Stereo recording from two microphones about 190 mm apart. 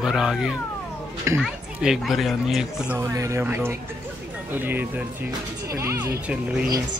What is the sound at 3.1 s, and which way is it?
Speech, 15° right (ahead or behind).